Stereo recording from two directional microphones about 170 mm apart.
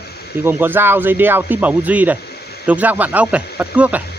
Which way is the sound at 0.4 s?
10° right (ahead or behind).